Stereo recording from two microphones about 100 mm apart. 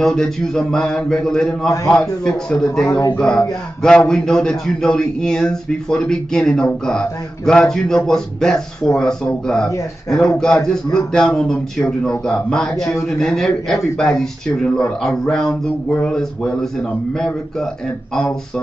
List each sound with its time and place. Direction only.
0.0 s speech: 5° left (ahead or behind)
2.9 s a man's voice: 30° left (ahead or behind)
3.2 s speech: 5° left (ahead or behind)